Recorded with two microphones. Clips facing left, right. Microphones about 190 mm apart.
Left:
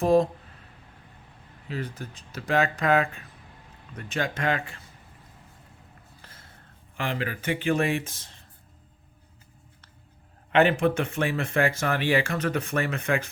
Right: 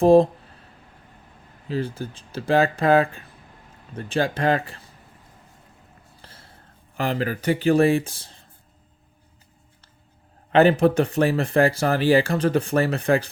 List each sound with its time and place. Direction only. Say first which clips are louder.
0.0 s speech: right 6 dB; 30° right (ahead or behind)
1.6 s speech: right 7 dB; 30° right (ahead or behind)
6.2 s a sound: right 5 dB; 30° right (ahead or behind)
6.9 s speech: right 6 dB; 40° right (ahead or behind)
10.5 s speech: right 5 dB; 35° right (ahead or behind)